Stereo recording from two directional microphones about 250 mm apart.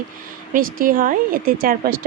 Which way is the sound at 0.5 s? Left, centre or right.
Right.